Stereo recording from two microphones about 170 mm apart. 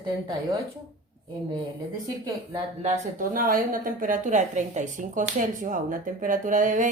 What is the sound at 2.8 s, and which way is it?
A woman's voice, 45° right (ahead or behind).